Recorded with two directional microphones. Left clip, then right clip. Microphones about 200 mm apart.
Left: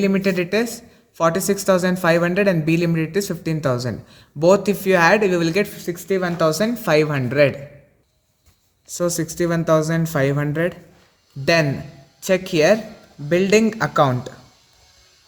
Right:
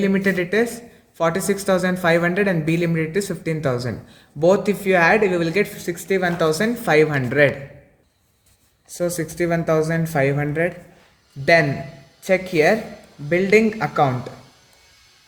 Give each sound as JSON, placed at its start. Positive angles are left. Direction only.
{"t": 0.0, "sound": "speech", "side_deg": 35}
{"t": 8.9, "sound": "speech", "side_deg": 40}
{"t": 12.2, "sound": "speech", "side_deg": 45}